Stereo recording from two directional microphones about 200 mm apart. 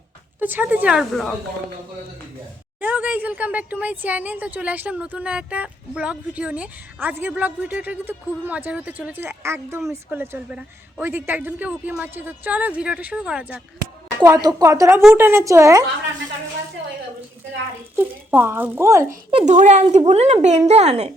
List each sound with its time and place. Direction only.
0.3 s speech: 10° right (ahead or behind)
2.8 s speech: 10° right (ahead or behind)
14.2 s speech: 15° right (ahead or behind)
17.9 s speech: 10° right (ahead or behind)
19.3 s a woman's voice: 25° right (ahead or behind)